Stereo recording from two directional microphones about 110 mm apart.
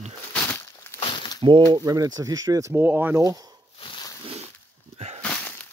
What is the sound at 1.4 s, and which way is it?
Speech, 50° right (ahead or behind).